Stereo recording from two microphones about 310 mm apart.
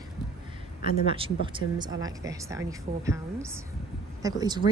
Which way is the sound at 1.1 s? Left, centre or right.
Centre.